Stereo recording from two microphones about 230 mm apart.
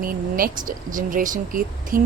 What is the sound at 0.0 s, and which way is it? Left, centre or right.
Speech, right.